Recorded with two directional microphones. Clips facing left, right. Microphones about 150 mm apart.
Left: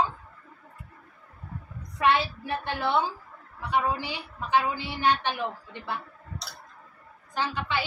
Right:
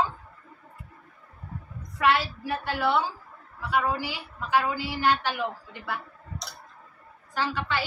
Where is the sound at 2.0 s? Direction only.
20° left (ahead or behind).